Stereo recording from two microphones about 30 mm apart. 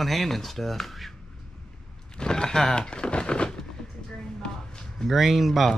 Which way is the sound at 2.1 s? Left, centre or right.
Left.